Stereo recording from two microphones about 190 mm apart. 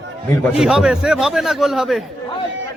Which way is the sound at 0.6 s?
5° right (ahead or behind).